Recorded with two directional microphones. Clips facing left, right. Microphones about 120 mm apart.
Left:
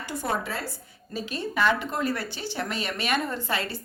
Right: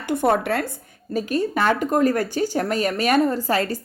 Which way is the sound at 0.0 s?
55° right (ahead or behind).